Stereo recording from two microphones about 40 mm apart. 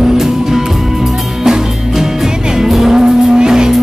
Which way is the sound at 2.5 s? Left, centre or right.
Centre.